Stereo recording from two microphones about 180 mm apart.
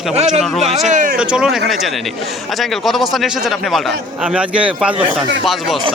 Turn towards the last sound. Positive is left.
turn(degrees=-5)  # may be behind; listen again after turning